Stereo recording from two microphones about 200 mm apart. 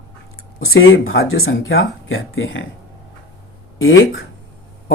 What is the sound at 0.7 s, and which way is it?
Speech, 85° left.